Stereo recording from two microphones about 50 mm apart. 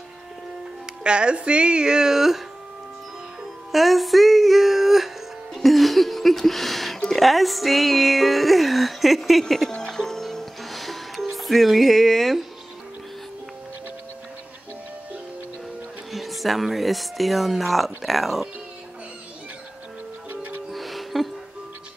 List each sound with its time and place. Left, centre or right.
1.0 s speech: centre
3.7 s music: centre
16.1 s speech: centre
20.2 s music: right
20.7 s music: centre